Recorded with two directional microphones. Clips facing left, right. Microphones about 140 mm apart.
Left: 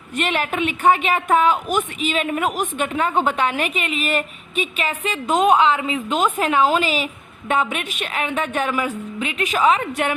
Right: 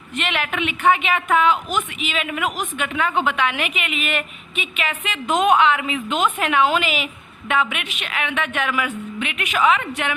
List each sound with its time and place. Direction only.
0.2 s a woman's voice: 40° left (ahead or behind)